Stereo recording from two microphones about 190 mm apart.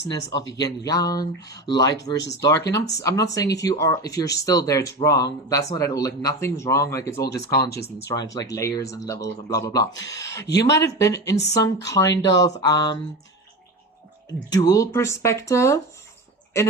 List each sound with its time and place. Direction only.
0.1 s speech: 20° left (ahead or behind)
7.3 s speech: 60° left (ahead or behind)
8.0 s speech: 20° left (ahead or behind)
14.3 s speech: 20° left (ahead or behind)